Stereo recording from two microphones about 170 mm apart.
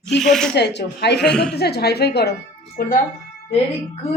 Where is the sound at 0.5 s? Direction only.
85° left.